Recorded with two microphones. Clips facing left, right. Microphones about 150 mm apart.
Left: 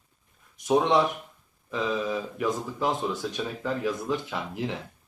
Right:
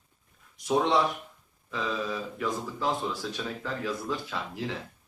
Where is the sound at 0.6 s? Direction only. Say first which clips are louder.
Left 3 dB; 20° left (ahead or behind).